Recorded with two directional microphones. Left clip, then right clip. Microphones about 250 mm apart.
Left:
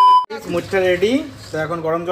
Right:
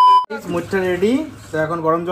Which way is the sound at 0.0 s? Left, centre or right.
Centre.